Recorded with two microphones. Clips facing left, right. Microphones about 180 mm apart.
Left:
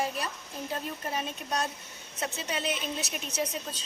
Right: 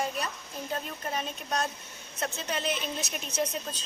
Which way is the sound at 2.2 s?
5° left (ahead or behind).